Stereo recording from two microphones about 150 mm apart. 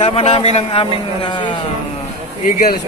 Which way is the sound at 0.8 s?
30° left (ahead or behind).